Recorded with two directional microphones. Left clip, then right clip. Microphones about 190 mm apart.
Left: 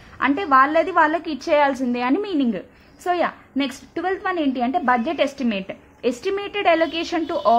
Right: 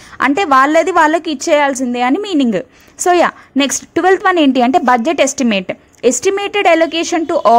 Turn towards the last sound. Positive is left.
turn(degrees=-35)  # may be behind; listen again after turning